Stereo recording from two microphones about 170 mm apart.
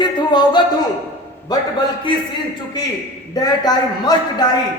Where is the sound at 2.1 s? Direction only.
30° left (ahead or behind).